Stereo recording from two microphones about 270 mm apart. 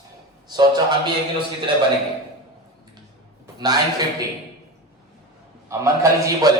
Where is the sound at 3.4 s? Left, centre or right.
Centre.